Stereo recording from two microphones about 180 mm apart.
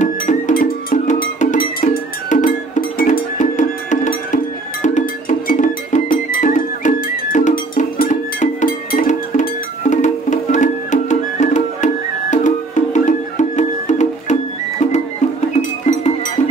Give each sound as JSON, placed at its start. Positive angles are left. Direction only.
{"t": 0.0, "sound": "music", "side_deg": 45}
{"t": 5.5, "sound": "music", "side_deg": 45}
{"t": 15.8, "sound": "music", "side_deg": 40}